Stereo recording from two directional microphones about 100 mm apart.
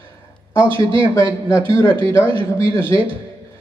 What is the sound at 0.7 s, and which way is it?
A man's voice, 25° left (ahead or behind).